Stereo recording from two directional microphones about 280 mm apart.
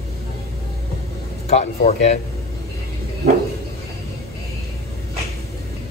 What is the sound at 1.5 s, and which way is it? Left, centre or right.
Speech, left.